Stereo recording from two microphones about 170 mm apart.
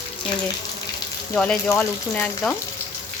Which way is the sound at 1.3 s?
5° left (ahead or behind).